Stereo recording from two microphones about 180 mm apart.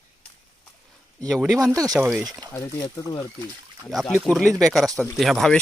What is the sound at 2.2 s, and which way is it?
Speech, 20° right (ahead or behind).